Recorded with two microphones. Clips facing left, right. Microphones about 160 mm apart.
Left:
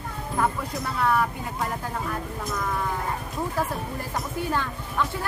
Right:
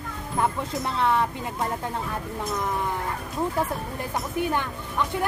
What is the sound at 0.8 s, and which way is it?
Speech, 25° right (ahead or behind).